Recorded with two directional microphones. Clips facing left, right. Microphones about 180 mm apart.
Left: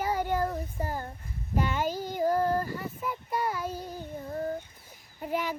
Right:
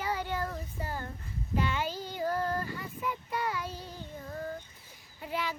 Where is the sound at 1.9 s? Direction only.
10° left (ahead or behind).